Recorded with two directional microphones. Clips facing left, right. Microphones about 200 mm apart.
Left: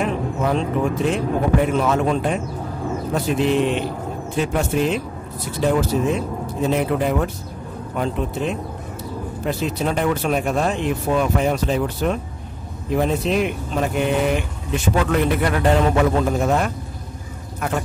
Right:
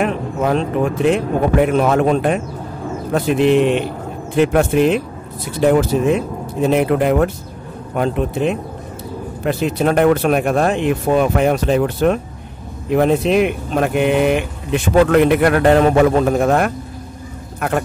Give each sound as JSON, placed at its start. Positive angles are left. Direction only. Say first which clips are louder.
{"t": 0.0, "sound": "speech", "louder": "right 3 dB", "side_deg": -65}